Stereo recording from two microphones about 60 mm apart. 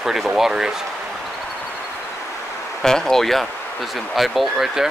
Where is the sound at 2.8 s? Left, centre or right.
Centre.